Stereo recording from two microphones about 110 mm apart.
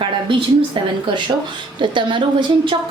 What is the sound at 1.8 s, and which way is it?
Speech, 45° right (ahead or behind).